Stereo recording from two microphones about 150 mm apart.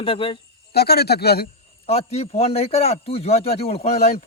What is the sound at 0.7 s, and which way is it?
Speech, 90° left.